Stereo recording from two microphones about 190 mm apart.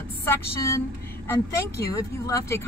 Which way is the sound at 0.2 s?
15° left (ahead or behind).